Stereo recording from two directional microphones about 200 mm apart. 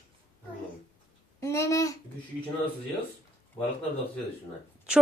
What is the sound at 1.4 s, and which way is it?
Babbling, 15° left (ahead or behind).